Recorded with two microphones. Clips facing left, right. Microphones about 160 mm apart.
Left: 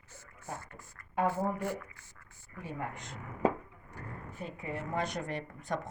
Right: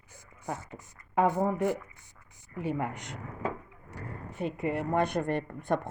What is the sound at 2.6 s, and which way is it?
Speech, 80° right.